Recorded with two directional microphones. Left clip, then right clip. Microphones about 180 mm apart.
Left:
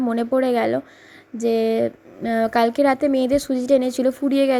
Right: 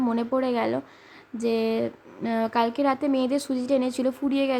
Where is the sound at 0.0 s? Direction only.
15° left (ahead or behind).